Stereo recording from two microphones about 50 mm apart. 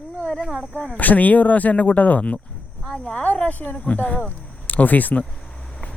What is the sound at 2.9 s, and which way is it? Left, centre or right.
Speech, left.